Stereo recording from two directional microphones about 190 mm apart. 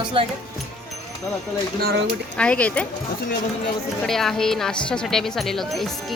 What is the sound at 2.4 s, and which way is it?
Speech, 5° left (ahead or behind).